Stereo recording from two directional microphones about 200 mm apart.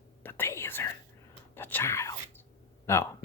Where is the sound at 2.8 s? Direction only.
10° left (ahead or behind).